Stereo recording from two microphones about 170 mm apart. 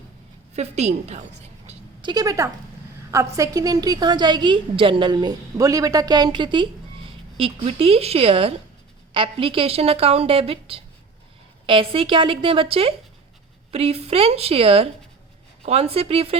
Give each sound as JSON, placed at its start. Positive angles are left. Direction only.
{"t": 0.5, "sound": "a woman's voice", "side_deg": -40}
{"t": 2.0, "sound": "a woman's voice", "side_deg": -25}